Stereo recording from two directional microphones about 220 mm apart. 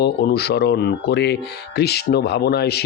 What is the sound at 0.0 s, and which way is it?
Speech, 45° left (ahead or behind).